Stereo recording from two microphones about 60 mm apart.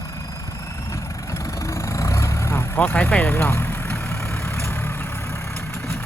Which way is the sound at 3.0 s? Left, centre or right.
Left.